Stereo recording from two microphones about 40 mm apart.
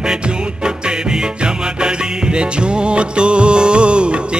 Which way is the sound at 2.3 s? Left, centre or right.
Right.